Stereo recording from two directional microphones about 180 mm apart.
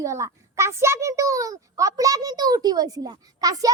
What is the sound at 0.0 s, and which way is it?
A child's voice, 15° right (ahead or behind).